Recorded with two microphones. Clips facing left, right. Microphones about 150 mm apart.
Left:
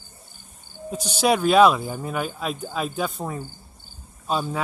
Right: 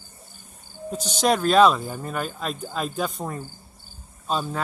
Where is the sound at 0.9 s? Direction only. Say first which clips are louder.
Left 1 dB; 10° left (ahead or behind).